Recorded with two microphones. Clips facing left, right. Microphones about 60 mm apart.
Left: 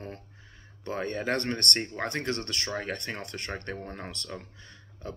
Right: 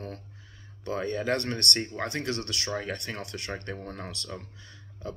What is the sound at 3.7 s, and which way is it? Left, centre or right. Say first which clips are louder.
Speech: even; left.